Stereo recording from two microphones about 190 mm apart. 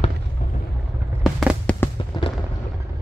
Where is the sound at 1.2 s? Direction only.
Centre (ahead or behind).